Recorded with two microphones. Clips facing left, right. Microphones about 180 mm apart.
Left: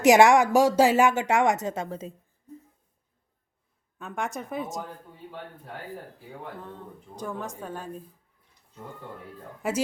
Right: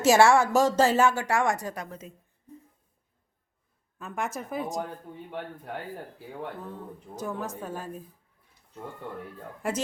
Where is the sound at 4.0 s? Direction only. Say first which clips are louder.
Even; centre (ahead or behind).